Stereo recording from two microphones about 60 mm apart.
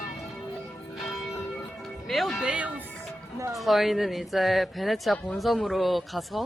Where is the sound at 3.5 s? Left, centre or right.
Centre.